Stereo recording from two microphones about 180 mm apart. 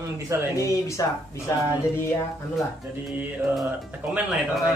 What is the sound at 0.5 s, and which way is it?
Speech, 15° left (ahead or behind).